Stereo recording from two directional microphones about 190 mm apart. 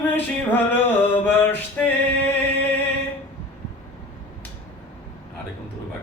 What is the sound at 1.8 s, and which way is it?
Music, 5° left (ahead or behind).